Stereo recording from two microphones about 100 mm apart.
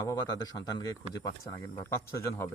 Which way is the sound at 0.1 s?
40° left (ahead or behind).